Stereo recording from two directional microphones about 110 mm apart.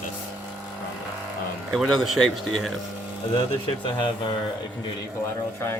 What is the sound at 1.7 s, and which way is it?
A man's voice, centre (ahead or behind).